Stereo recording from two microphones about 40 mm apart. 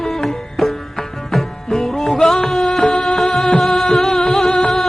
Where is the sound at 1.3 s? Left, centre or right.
Centre.